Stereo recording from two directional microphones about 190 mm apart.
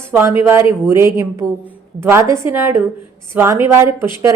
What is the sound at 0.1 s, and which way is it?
A woman's voice, 15° right (ahead or behind).